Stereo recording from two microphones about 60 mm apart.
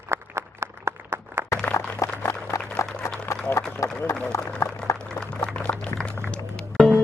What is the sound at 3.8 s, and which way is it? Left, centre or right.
Run, left.